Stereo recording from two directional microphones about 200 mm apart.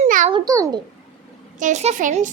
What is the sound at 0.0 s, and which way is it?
Babbling, 35° right (ahead or behind).